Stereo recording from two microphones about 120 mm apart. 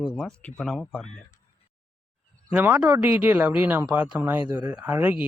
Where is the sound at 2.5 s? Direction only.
15° right (ahead or behind).